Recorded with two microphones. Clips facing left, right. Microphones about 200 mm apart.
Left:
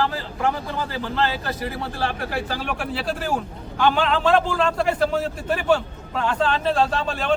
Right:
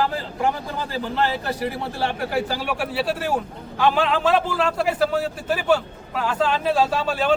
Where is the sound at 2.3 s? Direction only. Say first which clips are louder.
Right 3 dB; 10° right (ahead or behind).